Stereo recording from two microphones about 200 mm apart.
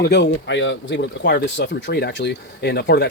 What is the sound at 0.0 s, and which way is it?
Speech, 60° left (ahead or behind).